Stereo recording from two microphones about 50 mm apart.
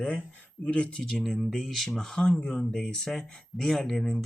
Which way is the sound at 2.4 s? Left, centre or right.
Left.